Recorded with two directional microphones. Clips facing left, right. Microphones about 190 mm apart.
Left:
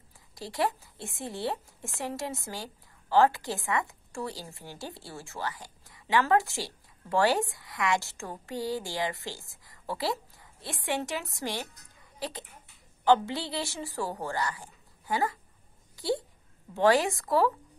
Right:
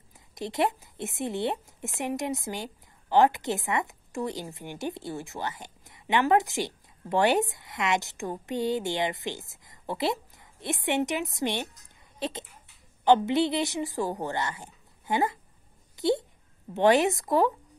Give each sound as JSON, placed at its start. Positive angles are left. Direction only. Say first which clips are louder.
{"t": 0.3, "sound": "a woman's voice", "louder": "right 3 dB", "side_deg": -20}